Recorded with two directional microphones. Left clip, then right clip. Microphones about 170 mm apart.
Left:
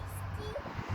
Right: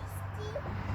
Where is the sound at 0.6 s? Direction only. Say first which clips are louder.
Even; 75° left (ahead or behind).